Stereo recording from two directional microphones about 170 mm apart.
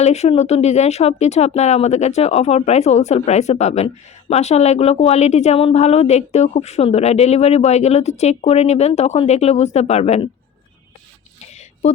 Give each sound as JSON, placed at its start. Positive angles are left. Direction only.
{"t": 0.0, "sound": "speech", "side_deg": 40}